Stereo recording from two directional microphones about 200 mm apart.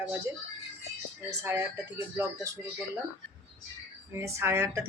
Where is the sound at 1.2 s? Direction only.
10° right (ahead or behind).